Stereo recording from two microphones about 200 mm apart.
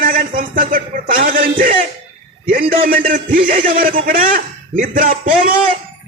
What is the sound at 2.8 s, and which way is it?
A man's voice, 45° right (ahead or behind).